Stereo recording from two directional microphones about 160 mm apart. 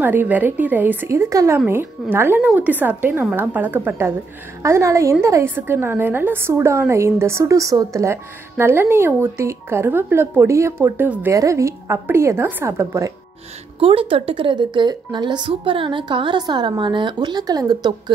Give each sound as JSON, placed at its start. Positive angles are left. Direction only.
{"t": 0.0, "sound": "a woman's voice", "side_deg": -10}
{"t": 13.7, "sound": "a woman's voice", "side_deg": -35}